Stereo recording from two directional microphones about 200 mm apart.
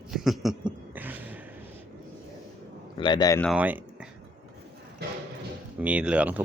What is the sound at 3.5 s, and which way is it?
Speech, 5° right (ahead or behind).